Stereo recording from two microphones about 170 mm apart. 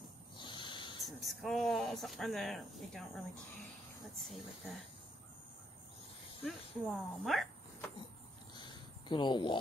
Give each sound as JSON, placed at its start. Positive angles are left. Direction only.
{"t": 0.4, "sound": "snake", "side_deg": 30}
{"t": 1.0, "sound": "speech", "side_deg": 0}
{"t": 4.2, "sound": "a woman's voice", "side_deg": 0}
{"t": 6.4, "sound": "a woman's voice", "side_deg": 0}
{"t": 8.5, "sound": "cricket", "side_deg": 25}